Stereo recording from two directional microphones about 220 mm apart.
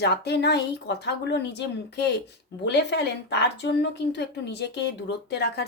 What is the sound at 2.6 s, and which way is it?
A woman's voice, 50° left (ahead or behind).